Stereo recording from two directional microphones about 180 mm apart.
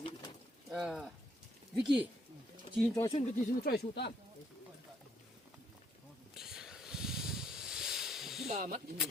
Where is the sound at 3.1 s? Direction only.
55° left (ahead or behind).